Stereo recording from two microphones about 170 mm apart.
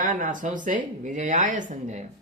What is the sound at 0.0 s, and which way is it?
A man's voice, 50° right (ahead or behind).